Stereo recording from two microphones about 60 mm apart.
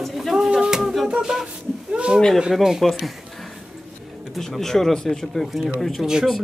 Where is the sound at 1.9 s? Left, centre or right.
Centre.